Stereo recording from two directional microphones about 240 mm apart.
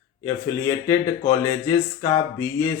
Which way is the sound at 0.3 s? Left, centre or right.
Centre.